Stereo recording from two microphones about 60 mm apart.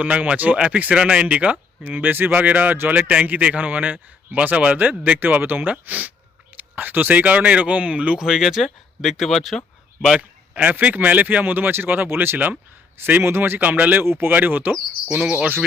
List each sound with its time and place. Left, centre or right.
0.0 s speech: centre
3.1 s speech: right
8.2 s speech: centre
10.2 s speech: right
14.0 s speech: right
15.1 s cricket: centre